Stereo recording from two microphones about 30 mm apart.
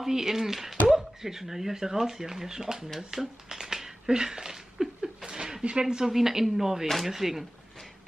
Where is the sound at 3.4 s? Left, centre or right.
Centre.